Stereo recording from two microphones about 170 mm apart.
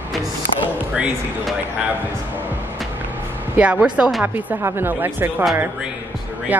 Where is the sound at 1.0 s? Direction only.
5° right (ahead or behind).